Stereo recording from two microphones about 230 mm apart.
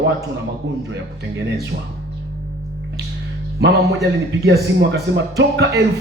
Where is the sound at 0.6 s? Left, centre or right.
Right.